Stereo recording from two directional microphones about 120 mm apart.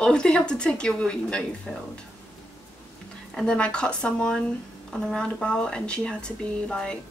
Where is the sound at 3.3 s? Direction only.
5° left (ahead or behind).